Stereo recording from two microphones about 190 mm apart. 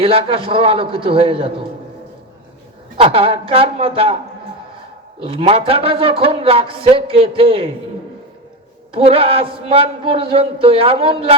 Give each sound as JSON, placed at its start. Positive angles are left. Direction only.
{"t": 0.0, "sound": "a man's voice", "side_deg": -30}
{"t": 3.0, "sound": "a man's voice", "side_deg": -30}
{"t": 5.2, "sound": "a man's voice", "side_deg": -30}
{"t": 8.9, "sound": "a man's voice", "side_deg": -30}